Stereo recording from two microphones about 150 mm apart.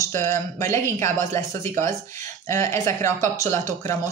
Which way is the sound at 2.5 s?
20° left (ahead or behind).